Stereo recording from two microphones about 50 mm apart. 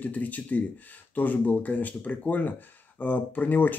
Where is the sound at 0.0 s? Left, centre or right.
Left.